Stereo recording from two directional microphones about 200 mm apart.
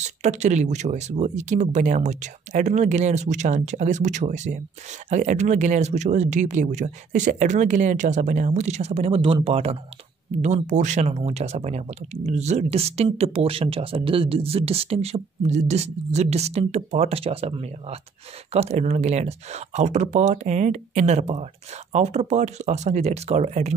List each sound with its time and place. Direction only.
0.0 s speech: 35° right (ahead or behind)